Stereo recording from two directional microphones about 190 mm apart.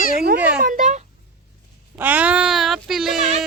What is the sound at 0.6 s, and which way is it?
Speech, 45° right (ahead or behind).